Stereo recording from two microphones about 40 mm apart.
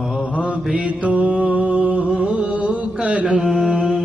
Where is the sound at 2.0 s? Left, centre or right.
Right.